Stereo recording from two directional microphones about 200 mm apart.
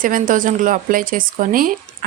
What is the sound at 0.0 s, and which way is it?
Speech, 40° right (ahead or behind).